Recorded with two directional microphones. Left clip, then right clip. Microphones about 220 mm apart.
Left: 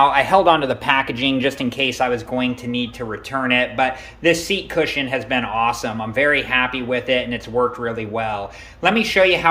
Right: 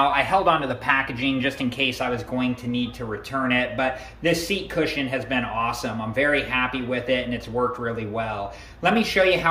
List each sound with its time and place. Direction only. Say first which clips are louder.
0.0 s a man's voice: left 6 dB; 20° left (ahead or behind)